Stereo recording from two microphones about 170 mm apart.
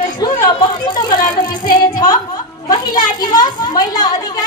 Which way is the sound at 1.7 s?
25° left (ahead or behind).